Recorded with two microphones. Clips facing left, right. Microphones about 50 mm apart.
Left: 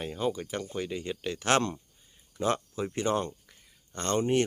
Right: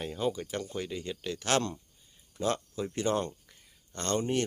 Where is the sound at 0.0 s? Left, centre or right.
Centre; by 1.8 s left.